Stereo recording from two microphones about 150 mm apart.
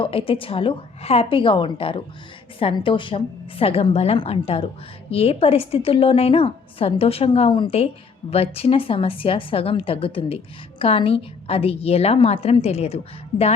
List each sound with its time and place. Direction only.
0.0 s a woman's voice: 35° left (ahead or behind)
13.3 s a woman's voice: 35° left (ahead or behind)